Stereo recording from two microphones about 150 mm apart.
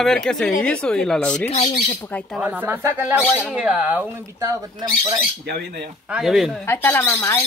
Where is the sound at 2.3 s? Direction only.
10° right (ahead or behind).